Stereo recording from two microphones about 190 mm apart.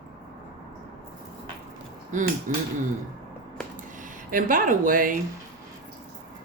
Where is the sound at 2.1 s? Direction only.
40° right (ahead or behind).